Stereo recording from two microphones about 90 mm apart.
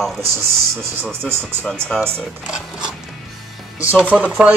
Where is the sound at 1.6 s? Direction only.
5° left (ahead or behind).